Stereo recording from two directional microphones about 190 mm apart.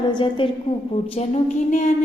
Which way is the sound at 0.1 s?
25° left (ahead or behind).